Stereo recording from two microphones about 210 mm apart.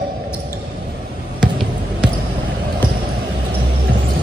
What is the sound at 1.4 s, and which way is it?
Basketball bounce, 5° right (ahead or behind).